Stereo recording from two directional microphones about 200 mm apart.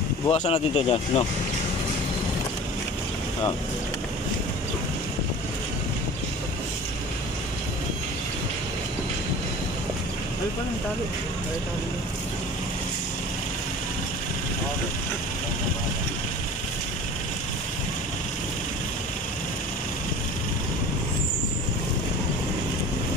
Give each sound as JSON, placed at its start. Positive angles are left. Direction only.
{"t": 0.3, "sound": "speech", "side_deg": 30}